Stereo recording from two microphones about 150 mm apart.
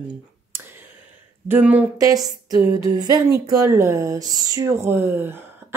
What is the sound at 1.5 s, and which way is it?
Speech, 10° right (ahead or behind).